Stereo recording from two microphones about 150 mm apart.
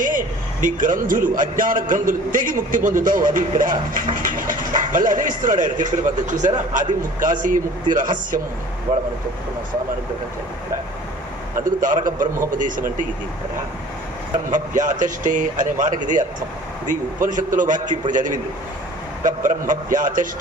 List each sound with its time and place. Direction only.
0.0 s a man's voice: 65° right (ahead or behind)
11.8 s a man's voice: 60° right (ahead or behind)
14.5 s a man's voice: 60° right (ahead or behind)